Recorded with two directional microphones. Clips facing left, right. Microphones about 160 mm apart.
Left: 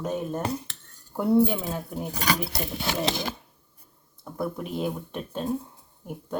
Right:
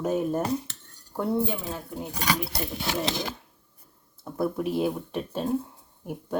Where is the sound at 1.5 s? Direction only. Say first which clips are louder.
Left 2 dB; 15° left (ahead or behind).